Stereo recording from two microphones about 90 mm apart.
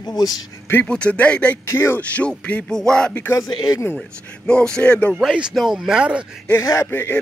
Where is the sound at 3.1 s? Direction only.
25° left (ahead or behind).